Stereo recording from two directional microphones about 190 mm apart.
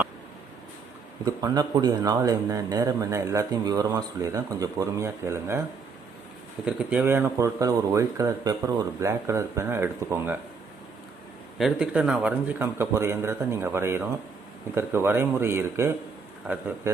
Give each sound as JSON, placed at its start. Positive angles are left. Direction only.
{"t": 1.2, "sound": "speech", "side_deg": -20}
{"t": 6.7, "sound": "speech", "side_deg": -10}
{"t": 11.5, "sound": "speech", "side_deg": 0}